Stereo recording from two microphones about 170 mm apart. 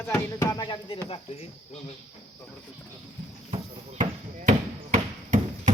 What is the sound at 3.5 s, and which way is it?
Basketball bounce, 45° right (ahead or behind).